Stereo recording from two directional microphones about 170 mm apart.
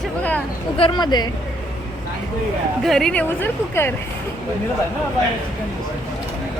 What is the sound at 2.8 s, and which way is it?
Speech, centre (ahead or behind).